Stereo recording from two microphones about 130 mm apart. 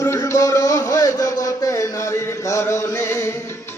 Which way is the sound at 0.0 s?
25° left (ahead or behind).